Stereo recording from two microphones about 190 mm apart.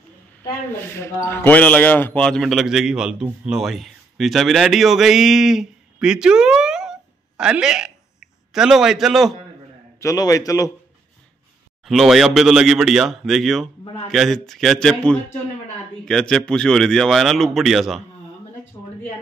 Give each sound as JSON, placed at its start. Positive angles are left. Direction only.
{"t": 0.8, "sound": "a man's voice", "side_deg": 10}
{"t": 9.9, "sound": "a man's voice", "side_deg": 15}
{"t": 11.8, "sound": "speech", "side_deg": 0}
{"t": 18.8, "sound": "a sound", "side_deg": 15}